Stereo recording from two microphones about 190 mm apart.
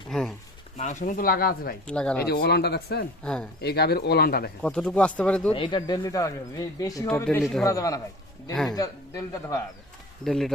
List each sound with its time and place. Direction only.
0.1 s a sound: centre (ahead or behind)
0.8 s speech: 40° left (ahead or behind)
1.9 s speech: 5° left (ahead or behind)
2.2 s speech: 55° left (ahead or behind)
3.2 s speech: 5° left (ahead or behind)
3.6 s speech: 55° left (ahead or behind)
4.6 s speech: 5° left (ahead or behind)
5.5 s speech: 25° left (ahead or behind)
10.2 s speech: centre (ahead or behind)